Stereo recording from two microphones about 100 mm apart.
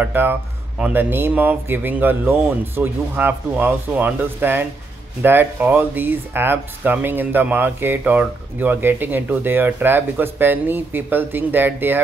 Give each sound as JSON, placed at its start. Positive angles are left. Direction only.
{"t": 0.0, "sound": "speech", "side_deg": -20}